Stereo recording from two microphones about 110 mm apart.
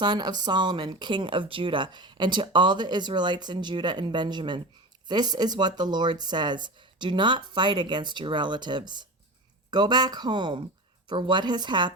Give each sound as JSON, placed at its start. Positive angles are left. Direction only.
{"t": 0.0, "sound": "speech", "side_deg": -40}